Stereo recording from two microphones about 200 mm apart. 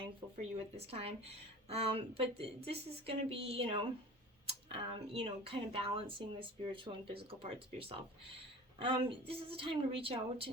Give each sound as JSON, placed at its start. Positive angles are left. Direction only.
{"t": 0.5, "sound": "speech", "side_deg": -30}